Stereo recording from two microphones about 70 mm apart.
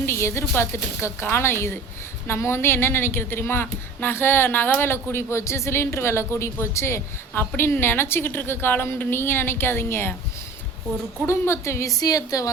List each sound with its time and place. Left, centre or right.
0.0 s a woman's voice: left
11.3 s a woman's voice: left
11.9 s a woman's voice: left